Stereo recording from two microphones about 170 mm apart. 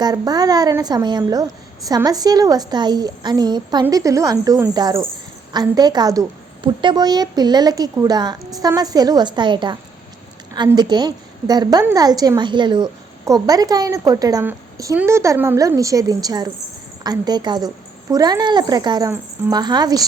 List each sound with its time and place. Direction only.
0.0 s a woman's voice: 20° right (ahead or behind)
10.8 s a woman's voice: 25° right (ahead or behind)